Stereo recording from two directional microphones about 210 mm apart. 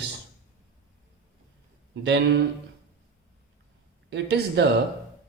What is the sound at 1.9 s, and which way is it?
Speech, 60° right (ahead or behind).